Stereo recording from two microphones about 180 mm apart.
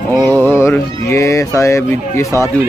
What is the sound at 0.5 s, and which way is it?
A man's voice, 15° left (ahead or behind).